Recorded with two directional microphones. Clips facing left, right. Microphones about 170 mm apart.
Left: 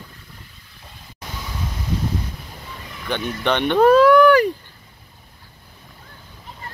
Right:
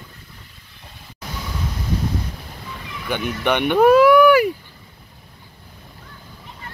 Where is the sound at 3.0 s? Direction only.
10° right (ahead or behind).